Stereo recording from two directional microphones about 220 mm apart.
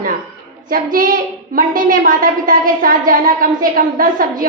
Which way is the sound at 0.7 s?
40° right (ahead or behind).